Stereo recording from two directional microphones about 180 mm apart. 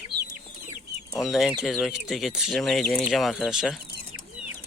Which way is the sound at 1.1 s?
Centre (ahead or behind).